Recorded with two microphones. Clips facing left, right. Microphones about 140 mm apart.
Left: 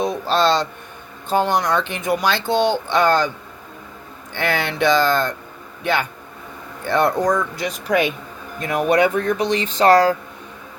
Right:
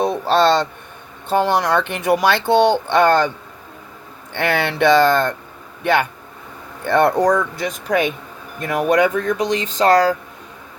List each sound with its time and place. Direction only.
0.0 s a sound: 60° right (ahead or behind)
1.3 s speech: 65° right (ahead or behind)
4.4 s speech: 60° right (ahead or behind); by 9.9 s 40° right (ahead or behind)